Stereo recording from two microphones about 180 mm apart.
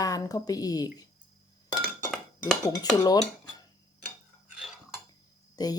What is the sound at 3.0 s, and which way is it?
Speech, 20° left (ahead or behind).